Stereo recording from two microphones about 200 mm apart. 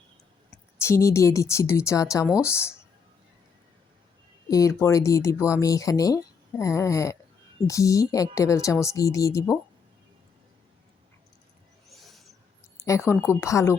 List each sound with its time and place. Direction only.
0.8 s speech: 15° left (ahead or behind)
4.4 s speech: 15° left (ahead or behind)
11.9 s a sound: centre (ahead or behind)
12.7 s speech: 15° left (ahead or behind)